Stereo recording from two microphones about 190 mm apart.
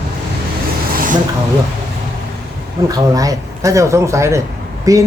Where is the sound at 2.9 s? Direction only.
20° right (ahead or behind).